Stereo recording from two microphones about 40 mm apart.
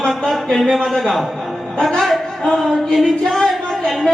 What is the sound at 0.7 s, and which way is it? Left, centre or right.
Speech, centre.